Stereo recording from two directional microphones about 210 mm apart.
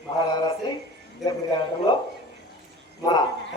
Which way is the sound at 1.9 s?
20° left (ahead or behind).